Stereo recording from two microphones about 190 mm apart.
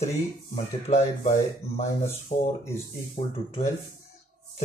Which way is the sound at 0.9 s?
40° left (ahead or behind).